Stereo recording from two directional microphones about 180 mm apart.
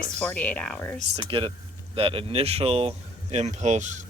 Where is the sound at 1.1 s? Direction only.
30° right (ahead or behind).